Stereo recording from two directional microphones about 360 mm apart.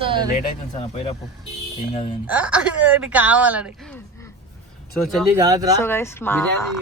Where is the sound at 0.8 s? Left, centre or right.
Centre.